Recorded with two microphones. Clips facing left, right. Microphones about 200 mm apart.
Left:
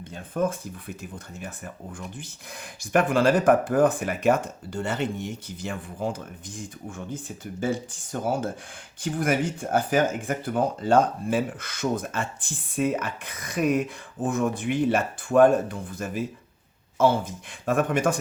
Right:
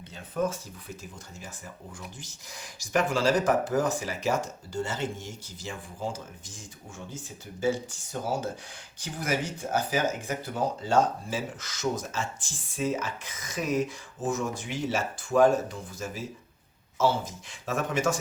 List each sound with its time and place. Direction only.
0.0 s speech: 50° left (ahead or behind)